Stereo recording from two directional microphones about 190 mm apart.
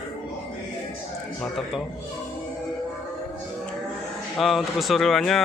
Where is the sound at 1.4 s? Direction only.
Centre (ahead or behind).